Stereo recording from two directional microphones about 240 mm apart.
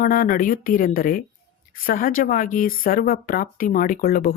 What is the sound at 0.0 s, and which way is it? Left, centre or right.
Speech, left.